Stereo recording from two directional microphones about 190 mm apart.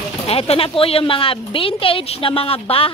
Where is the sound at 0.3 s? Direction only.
30° left (ahead or behind).